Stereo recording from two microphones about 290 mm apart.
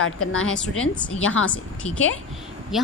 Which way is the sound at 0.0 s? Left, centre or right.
Left.